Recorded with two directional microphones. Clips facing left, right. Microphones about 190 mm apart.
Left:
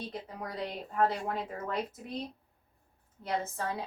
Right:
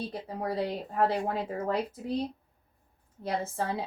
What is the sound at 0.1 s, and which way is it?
Speech, 30° right (ahead or behind).